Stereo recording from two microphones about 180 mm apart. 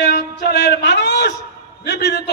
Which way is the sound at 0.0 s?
70° left (ahead or behind).